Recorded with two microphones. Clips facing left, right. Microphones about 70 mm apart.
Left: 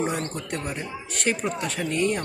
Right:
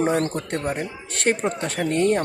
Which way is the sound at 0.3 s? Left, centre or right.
Right.